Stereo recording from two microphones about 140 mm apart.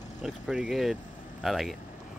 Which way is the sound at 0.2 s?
Centre (ahead or behind).